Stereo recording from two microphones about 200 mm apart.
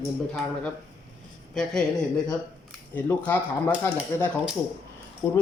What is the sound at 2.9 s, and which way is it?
Speech, 10° left (ahead or behind).